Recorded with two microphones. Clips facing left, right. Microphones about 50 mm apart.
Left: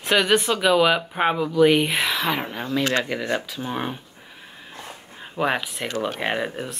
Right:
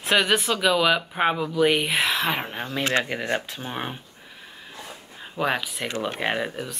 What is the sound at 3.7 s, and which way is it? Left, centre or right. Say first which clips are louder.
Speech: left 3 dB; centre.